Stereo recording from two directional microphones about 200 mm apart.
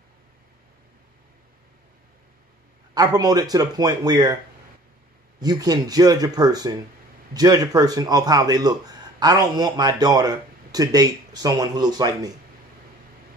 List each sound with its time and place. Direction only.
2.9 s speech: 20° right (ahead or behind)
5.4 s speech: 20° right (ahead or behind)